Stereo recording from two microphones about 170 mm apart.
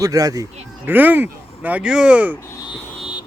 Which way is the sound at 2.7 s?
Centre (ahead or behind).